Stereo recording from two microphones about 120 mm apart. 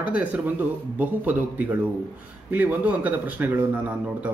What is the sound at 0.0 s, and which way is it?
Speech, 10° right (ahead or behind).